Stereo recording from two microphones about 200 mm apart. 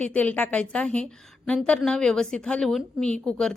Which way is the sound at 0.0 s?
5° left (ahead or behind).